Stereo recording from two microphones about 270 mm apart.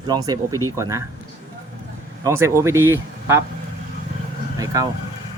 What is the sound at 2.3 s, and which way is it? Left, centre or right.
Speech, centre.